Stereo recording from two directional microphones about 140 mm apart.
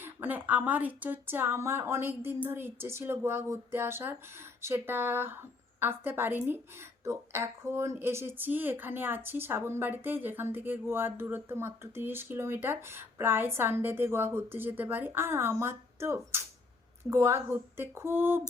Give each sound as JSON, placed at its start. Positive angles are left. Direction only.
{"t": 0.0, "sound": "speech", "side_deg": -15}